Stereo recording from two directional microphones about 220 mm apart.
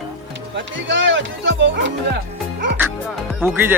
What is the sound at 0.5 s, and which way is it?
Speech, 55° right (ahead or behind).